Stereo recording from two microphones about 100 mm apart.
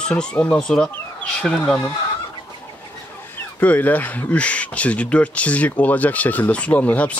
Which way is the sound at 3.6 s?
15° left (ahead or behind).